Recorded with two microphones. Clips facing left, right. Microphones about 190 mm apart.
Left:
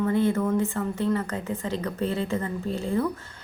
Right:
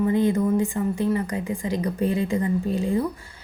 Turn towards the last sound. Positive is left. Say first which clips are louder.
# right 2 dB
turn(degrees=-15)  # may be behind; listen again after turning